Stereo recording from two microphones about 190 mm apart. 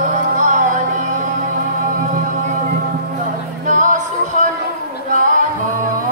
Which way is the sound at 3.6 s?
40° right (ahead or behind).